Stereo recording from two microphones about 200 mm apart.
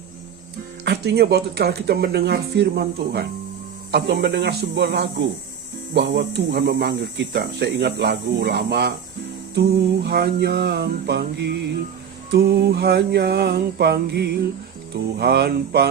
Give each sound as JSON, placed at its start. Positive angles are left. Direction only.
{"t": 0.9, "sound": "speech", "side_deg": -55}